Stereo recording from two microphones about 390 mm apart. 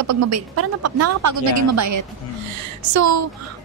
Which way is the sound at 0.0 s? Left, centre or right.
Right.